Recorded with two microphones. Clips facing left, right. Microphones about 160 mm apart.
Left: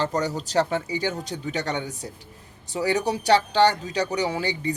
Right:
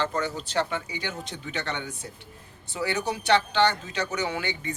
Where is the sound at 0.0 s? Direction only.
40° left (ahead or behind).